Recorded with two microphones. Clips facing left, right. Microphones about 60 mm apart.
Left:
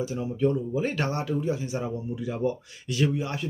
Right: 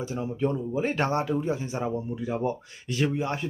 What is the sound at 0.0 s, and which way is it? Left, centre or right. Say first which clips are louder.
Speech: left 2 dB; right.